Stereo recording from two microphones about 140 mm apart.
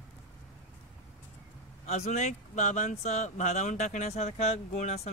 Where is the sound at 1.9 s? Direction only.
55° left (ahead or behind).